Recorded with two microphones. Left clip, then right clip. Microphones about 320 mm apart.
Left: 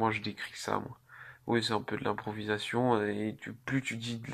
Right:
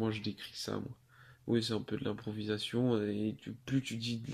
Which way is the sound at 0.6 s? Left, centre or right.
Left.